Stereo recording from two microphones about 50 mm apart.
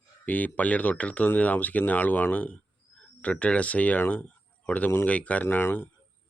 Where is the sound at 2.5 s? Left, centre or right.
Left.